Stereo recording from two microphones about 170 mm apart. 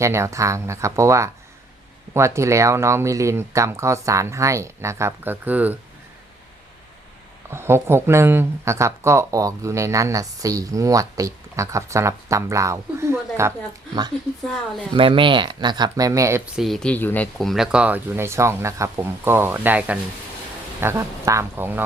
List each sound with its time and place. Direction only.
0.0 s speech: 15° right (ahead or behind)
7.5 s speech: 15° right (ahead or behind)
14.9 s speech: 30° right (ahead or behind)
16.6 s speech: centre (ahead or behind)